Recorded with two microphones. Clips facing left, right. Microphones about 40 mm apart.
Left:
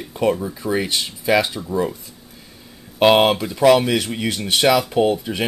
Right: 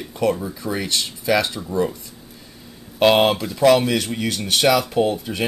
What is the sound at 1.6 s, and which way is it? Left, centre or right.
Speech, centre.